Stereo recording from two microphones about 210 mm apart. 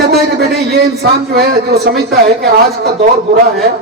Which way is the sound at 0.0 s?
50° right (ahead or behind).